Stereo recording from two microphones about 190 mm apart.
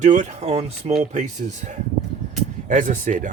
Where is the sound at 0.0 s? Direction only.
40° right (ahead or behind).